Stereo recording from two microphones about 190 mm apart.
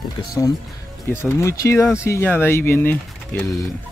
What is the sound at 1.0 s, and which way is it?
Speech, 10° left (ahead or behind).